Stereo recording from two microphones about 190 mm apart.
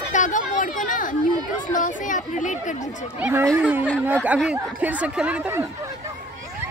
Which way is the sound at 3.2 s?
10° right (ahead or behind).